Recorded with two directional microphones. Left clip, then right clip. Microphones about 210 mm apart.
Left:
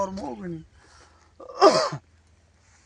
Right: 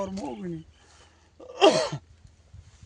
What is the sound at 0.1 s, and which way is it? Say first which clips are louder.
Speech: left 1 dB; 15° left (ahead or behind).